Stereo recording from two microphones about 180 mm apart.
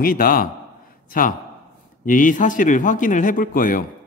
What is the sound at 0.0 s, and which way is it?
Speech, 50° left (ahead or behind).